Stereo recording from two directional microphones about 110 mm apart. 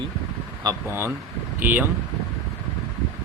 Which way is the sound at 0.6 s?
25° right (ahead or behind).